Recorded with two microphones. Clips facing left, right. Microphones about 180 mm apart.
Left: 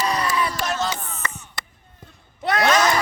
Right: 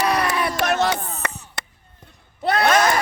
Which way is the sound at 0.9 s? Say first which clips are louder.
Right 4 dB; 35° right (ahead or behind).